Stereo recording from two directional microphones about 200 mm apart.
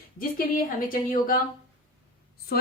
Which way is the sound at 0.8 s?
45° left (ahead or behind).